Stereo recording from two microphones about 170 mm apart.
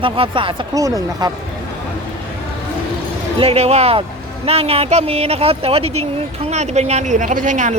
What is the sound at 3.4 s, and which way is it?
Speech, 40° right (ahead or behind).